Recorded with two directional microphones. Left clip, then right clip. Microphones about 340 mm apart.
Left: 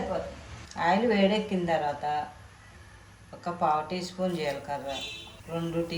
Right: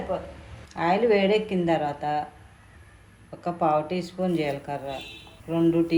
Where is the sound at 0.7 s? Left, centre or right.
Right.